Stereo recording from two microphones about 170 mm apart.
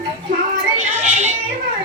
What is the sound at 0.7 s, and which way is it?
Music, 45° right (ahead or behind).